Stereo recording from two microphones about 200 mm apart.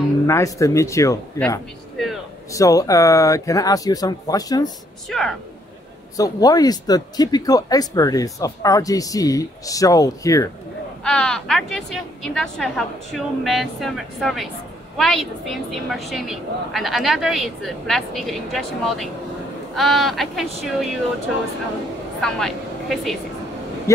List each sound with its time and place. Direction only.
0.3 s speech: 15° left (ahead or behind)
5.1 s a woman's voice: 5° left (ahead or behind)
6.1 s speech: 20° left (ahead or behind)
11.1 s a woman's voice: 5° left (ahead or behind)
22.2 s speech: centre (ahead or behind)